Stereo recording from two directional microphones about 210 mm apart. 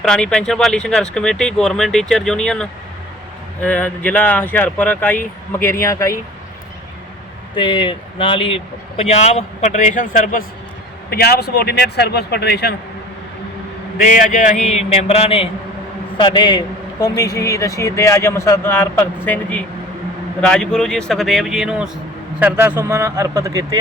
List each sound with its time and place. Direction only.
0.1 s a man's voice: 5° left (ahead or behind)
7.5 s a man's voice: 20° left (ahead or behind); by 12.7 s 50° left (ahead or behind)
14.0 s a man's voice: 40° left (ahead or behind); by 23.8 s 15° right (ahead or behind)